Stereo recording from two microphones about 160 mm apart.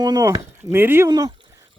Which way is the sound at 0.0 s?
25° right (ahead or behind).